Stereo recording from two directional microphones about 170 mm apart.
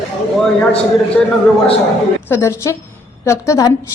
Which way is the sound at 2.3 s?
15° left (ahead or behind).